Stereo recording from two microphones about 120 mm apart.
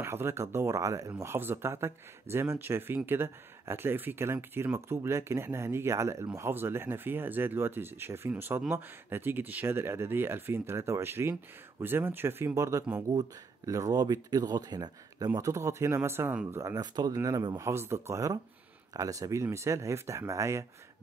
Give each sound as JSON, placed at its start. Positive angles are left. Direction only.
{"t": 0.0, "sound": "speech", "side_deg": -20}
{"t": 16.7, "sound": "speech", "side_deg": -35}